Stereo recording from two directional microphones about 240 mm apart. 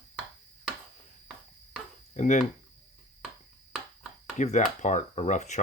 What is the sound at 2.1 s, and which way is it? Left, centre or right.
Speech, left.